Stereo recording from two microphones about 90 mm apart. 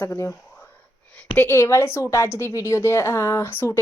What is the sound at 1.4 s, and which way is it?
Speech, 25° left (ahead or behind).